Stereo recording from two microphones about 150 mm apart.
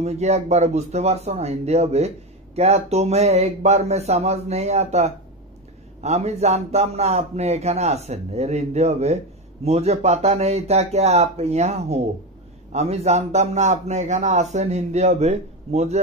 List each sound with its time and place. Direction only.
0.0 s speech: 45° right (ahead or behind)